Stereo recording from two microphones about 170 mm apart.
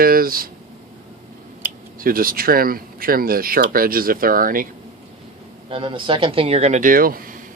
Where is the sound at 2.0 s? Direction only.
60° right (ahead or behind).